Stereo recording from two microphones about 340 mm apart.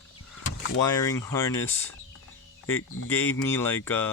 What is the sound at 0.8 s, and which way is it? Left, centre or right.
Speech, centre.